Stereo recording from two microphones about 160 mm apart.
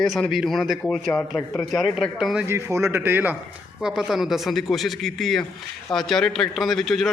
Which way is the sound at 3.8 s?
5° right (ahead or behind).